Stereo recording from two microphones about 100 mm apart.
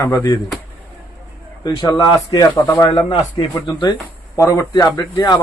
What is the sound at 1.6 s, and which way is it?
Speech, 45° left (ahead or behind).